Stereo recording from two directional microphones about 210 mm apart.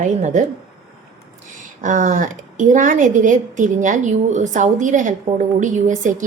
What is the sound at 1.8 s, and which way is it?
A woman's voice, 35° right (ahead or behind).